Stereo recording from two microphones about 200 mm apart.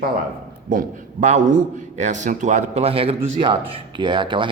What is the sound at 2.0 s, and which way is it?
A man's voice, 40° right (ahead or behind).